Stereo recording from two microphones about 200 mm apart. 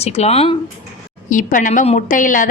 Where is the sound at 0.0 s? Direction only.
30° left (ahead or behind).